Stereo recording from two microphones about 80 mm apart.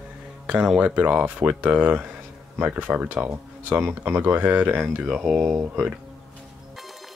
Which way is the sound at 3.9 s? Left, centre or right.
Right.